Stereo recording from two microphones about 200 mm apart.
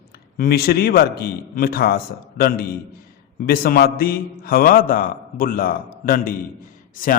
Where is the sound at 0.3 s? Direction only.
50° left (ahead or behind).